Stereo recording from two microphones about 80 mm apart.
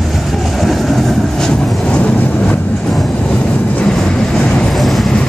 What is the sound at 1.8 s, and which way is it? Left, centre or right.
Vehicle, centre.